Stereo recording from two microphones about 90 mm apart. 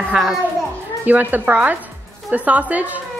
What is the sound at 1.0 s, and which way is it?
Speech, 20° right (ahead or behind).